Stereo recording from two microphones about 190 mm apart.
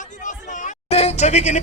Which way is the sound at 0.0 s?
40° left (ahead or behind).